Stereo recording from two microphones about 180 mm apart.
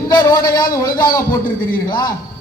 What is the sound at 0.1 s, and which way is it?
A man's voice, 20° left (ahead or behind).